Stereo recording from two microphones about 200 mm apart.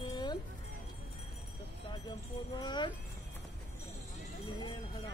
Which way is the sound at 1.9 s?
20° left (ahead or behind).